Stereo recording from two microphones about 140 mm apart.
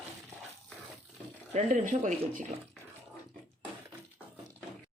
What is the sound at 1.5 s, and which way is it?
Speech, 55° right (ahead or behind).